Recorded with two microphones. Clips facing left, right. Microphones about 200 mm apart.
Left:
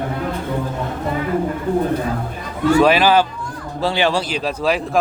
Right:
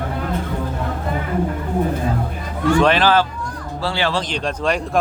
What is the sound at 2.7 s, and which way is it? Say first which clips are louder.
A man's voice: left 2 dB; 5° left (ahead or behind).